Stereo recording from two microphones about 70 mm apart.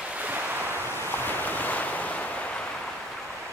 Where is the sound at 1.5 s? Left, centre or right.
Left.